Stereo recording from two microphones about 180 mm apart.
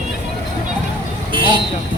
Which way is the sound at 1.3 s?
30° right (ahead or behind).